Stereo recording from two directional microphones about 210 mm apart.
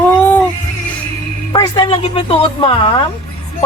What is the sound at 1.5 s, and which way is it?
Speech, 20° left (ahead or behind).